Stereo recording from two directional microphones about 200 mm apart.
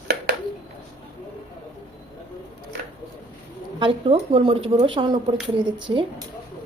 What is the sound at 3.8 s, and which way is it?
A woman's voice, 25° right (ahead or behind).